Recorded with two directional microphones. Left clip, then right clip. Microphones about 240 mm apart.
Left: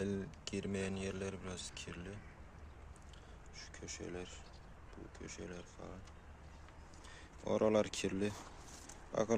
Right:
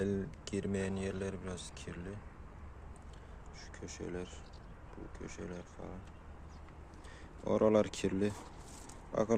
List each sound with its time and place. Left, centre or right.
0.0 s speech: centre
3.6 s speech: centre
7.4 s speech: centre